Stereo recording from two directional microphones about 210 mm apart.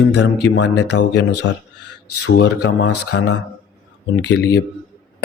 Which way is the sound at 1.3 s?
90° left.